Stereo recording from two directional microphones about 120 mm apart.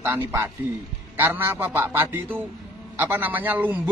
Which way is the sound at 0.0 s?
20° right (ahead or behind).